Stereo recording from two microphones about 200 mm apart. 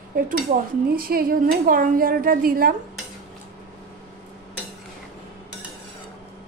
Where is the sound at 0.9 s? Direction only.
45° right (ahead or behind).